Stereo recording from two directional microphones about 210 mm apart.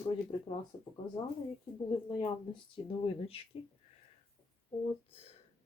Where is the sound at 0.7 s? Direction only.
30° left (ahead or behind).